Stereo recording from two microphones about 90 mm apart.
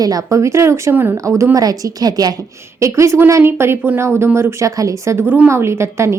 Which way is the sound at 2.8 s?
35° right (ahead or behind).